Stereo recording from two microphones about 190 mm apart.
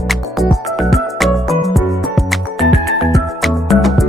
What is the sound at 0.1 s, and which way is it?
Music, centre (ahead or behind).